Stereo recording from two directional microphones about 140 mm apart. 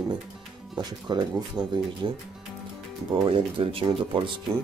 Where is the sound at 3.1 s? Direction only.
35° right (ahead or behind).